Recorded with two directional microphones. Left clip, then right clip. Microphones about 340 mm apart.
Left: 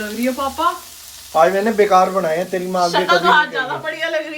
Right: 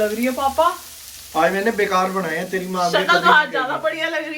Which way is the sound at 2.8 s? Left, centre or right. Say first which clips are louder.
Even; centre.